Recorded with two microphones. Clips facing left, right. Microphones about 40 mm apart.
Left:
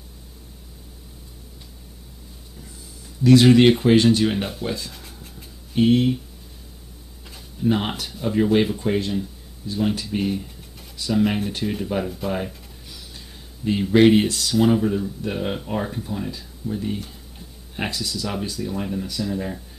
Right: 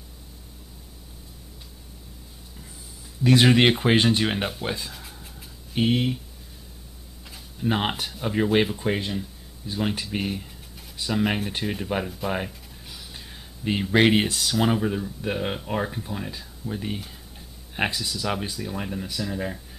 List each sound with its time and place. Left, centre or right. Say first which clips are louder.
3.8 s speech: left 4 dB; right
4.9 s a sound: left 1 dB; centre
5.8 s speech: left 5 dB; centre
7.6 s speech: left 3 dB; centre
13.6 s speech: left 4 dB; right; by 19.6 s centre